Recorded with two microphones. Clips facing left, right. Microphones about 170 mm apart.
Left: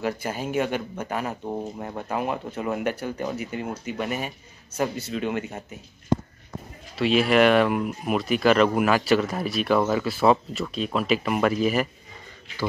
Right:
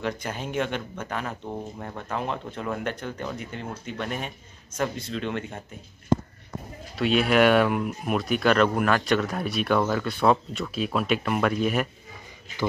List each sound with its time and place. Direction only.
0.0 s speech: 5° left (ahead or behind)
7.0 s speech: centre (ahead or behind)